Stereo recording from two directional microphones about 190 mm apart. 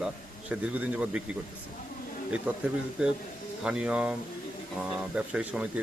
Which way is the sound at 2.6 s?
5° right (ahead or behind).